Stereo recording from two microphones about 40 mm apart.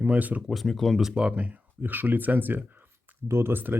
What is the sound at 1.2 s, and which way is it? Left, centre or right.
Speech, right.